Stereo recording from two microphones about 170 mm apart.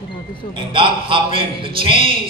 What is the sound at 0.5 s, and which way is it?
A man's voice, 30° right (ahead or behind).